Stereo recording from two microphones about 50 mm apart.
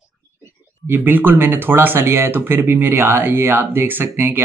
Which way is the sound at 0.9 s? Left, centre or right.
Right.